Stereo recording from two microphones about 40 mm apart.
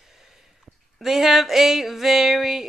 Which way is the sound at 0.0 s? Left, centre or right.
Centre.